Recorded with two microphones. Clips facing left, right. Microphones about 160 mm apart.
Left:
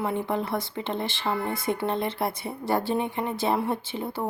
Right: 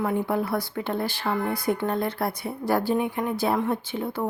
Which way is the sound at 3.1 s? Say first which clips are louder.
Right 1 dB; 25° left (ahead or behind).